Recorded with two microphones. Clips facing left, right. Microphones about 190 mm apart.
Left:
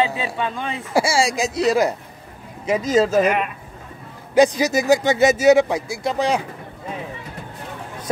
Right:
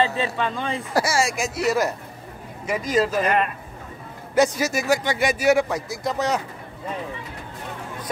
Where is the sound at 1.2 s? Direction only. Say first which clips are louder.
Left 4 dB; 20° left (ahead or behind).